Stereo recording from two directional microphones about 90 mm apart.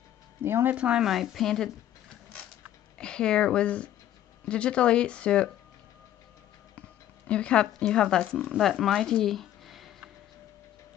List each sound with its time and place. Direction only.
0.4 s speech: 25° right (ahead or behind)
0.7 s speech: 10° right (ahead or behind)
3.0 s speech: 10° left (ahead or behind)
7.2 s speech: 10° left (ahead or behind)